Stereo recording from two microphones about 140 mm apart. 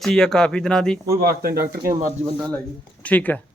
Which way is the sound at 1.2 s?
90° right.